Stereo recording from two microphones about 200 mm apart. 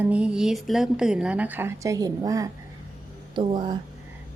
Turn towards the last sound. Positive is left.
turn(degrees=-20)  # may be behind; listen again after turning